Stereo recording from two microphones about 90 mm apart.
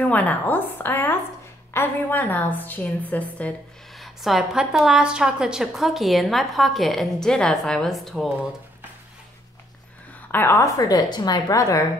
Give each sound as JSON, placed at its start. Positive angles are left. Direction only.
{"t": 0.0, "sound": "a woman's voice", "side_deg": 15}
{"t": 4.0, "sound": "a woman's voice", "side_deg": 0}
{"t": 10.3, "sound": "a woman's voice", "side_deg": 30}